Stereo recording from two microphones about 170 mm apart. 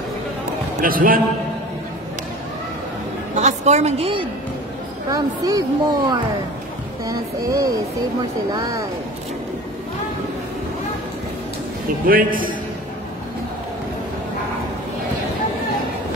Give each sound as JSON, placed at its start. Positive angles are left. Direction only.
{"t": 0.7, "sound": "a man's voice", "side_deg": -55}
{"t": 3.3, "sound": "a woman's voice", "side_deg": -40}
{"t": 5.1, "sound": "speech", "side_deg": -20}
{"t": 12.1, "sound": "a man's voice", "side_deg": -55}